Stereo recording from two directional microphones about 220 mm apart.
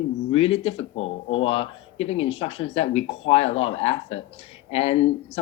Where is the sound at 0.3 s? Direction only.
25° left (ahead or behind).